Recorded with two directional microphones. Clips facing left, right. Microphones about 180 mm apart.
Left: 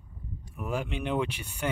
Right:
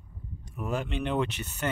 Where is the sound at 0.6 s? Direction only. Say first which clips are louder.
Right 1 dB; 10° left (ahead or behind).